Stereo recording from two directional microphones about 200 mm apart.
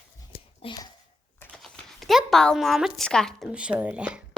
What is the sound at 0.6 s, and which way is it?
Speech, 20° left (ahead or behind).